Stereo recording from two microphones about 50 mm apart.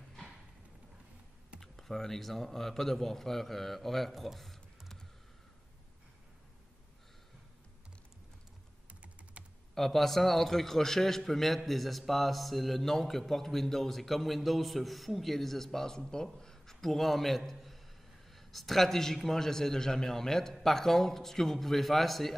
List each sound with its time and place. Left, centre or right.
1.6 s speech: centre
9.8 s a man's voice: centre